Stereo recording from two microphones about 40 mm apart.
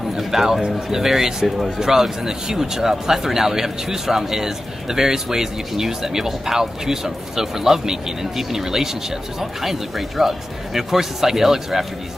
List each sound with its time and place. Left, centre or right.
0.1 s speech: centre
0.6 s speech: centre